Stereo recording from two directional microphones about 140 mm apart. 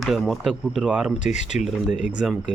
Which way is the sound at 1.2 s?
60° left (ahead or behind).